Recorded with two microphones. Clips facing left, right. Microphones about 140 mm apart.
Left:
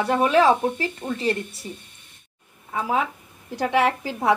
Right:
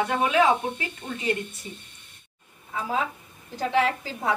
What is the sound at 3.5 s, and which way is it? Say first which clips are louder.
Speech: left 3 dB; 65° left (ahead or behind).